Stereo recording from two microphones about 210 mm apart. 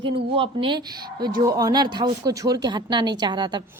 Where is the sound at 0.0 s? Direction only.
25° right (ahead or behind).